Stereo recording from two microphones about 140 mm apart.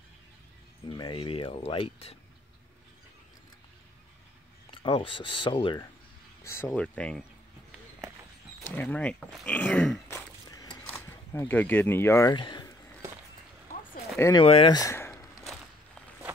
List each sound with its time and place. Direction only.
0.8 s speech: 35° left (ahead or behind)
4.6 s speech: 35° left (ahead or behind)
6.4 s speech: 20° left (ahead or behind)
6.7 s speech: 10° left (ahead or behind)
8.7 s speech: 10° left (ahead or behind)
12.4 s speech: 35° left (ahead or behind)
14.3 s speech: 40° left (ahead or behind)
14.7 s speech: 25° left (ahead or behind)
15.4 s a sound: centre (ahead or behind)